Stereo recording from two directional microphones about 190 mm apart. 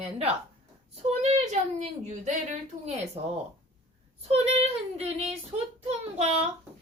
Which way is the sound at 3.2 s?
35° right (ahead or behind).